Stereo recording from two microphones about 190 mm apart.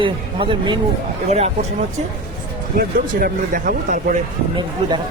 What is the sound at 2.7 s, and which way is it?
Speech, 50° right (ahead or behind).